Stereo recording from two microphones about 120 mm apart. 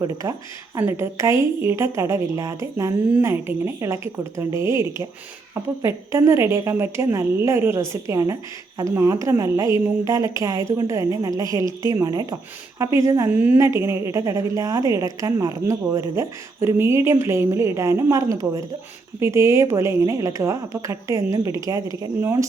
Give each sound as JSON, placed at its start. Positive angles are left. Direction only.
{"t": 0.2, "sound": "a woman's voice", "side_deg": -25}
{"t": 13.3, "sound": "a woman's voice", "side_deg": -15}